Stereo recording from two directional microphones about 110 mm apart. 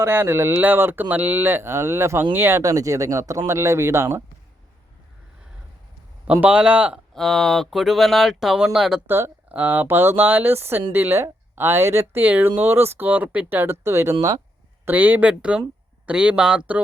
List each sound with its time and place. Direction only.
0.0 s speech: 20° right (ahead or behind)
6.2 s speech: 10° right (ahead or behind)
7.1 s speech: 5° left (ahead or behind)
9.0 s speech: 20° right (ahead or behind)
14.8 s speech: 15° right (ahead or behind)